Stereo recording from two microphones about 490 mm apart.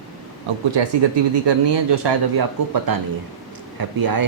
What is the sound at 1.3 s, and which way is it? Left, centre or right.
Speech, right.